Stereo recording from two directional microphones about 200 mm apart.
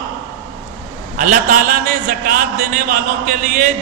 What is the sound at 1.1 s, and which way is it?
A man's voice, 40° right (ahead or behind).